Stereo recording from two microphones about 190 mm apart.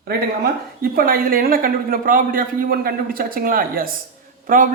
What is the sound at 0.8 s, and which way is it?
A man's voice, 50° right (ahead or behind).